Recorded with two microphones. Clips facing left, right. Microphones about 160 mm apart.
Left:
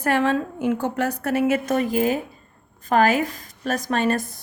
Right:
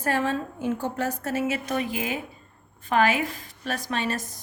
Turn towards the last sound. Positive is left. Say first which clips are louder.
# left 6 dB
turn(degrees=50)  # may be behind; listen again after turning